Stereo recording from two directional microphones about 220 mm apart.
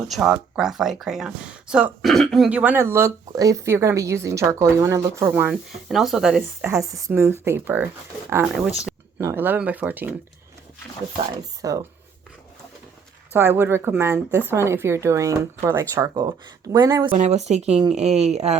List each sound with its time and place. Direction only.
0.1 s speech: 5° right (ahead or behind)
11.6 s speech: 15° right (ahead or behind)
13.3 s speech: 10° right (ahead or behind)
17.2 s speech: 30° right (ahead or behind)